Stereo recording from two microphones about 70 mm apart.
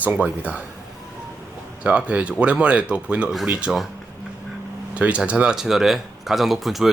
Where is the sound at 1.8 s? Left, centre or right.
Centre.